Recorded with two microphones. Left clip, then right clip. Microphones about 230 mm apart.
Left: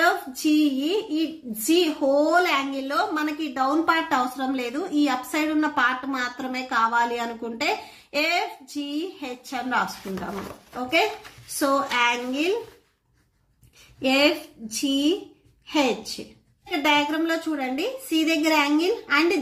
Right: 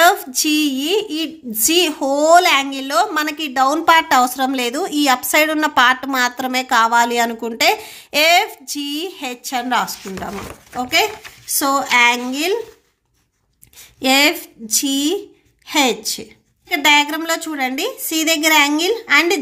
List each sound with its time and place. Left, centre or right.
0.0 s a woman's voice: right
11.6 s a woman's voice: right
14.0 s a woman's voice: right